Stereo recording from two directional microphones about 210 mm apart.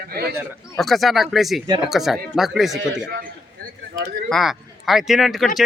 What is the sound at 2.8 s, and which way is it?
Speech, 60° right (ahead or behind).